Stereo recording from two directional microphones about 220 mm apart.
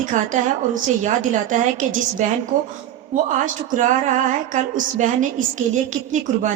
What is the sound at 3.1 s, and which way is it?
Speech, 35° right (ahead or behind).